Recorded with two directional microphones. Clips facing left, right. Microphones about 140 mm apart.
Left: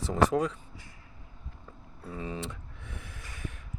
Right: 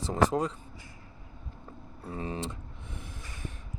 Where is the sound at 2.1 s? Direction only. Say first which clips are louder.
Right 2 dB; 35° right (ahead or behind).